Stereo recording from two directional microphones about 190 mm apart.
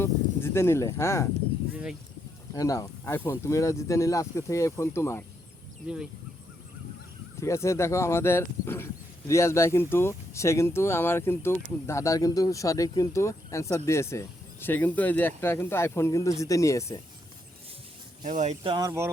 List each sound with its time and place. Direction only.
0.0 s speech: 10° left (ahead or behind)
1.7 s a sound: 5° right (ahead or behind)
2.5 s speech: 15° left (ahead or behind)
7.3 s speech: 15° left (ahead or behind)
18.2 s speech: 40° right (ahead or behind)
18.7 s speech: 20° right (ahead or behind)